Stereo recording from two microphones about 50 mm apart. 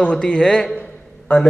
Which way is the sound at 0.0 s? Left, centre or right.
Centre.